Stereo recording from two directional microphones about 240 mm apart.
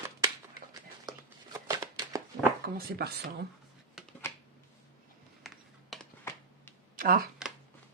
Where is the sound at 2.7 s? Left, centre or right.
Right.